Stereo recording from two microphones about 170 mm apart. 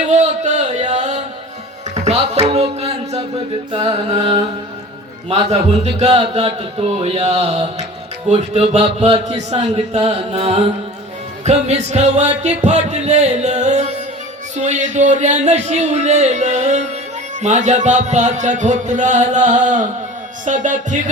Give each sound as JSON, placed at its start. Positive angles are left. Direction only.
{"t": 0.0, "sound": "a sound", "side_deg": -45}
{"t": 2.0, "sound": "music", "side_deg": -40}
{"t": 14.5, "sound": "speech", "side_deg": -45}